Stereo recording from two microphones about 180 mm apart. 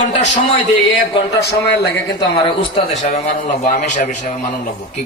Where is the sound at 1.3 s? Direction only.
70° left (ahead or behind).